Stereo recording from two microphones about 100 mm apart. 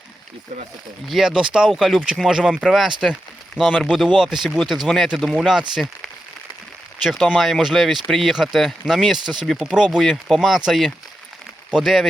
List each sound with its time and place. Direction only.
1.0 s speech: 5° right (ahead or behind)
7.3 s speech: centre (ahead or behind)